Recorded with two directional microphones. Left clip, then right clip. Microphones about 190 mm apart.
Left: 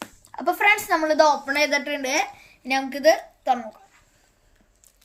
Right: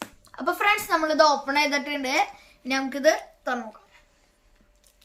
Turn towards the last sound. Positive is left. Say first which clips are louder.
# left 4 dB
turn(degrees=-25)  # may be behind; listen again after turning